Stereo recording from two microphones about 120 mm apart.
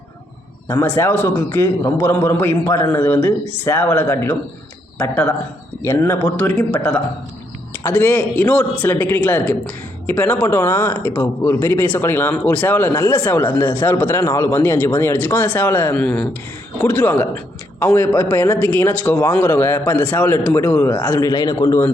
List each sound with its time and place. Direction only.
0.7 s a man's voice: 20° left (ahead or behind)
21.2 s speech: 30° left (ahead or behind)